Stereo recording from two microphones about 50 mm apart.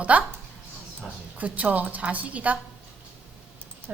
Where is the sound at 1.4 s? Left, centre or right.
Right.